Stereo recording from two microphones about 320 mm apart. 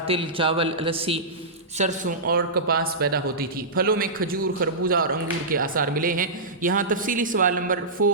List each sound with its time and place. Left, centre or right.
0.1 s a man's voice: centre